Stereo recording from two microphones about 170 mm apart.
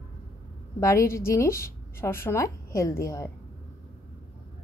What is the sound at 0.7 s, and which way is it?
A woman's voice, 15° left (ahead or behind).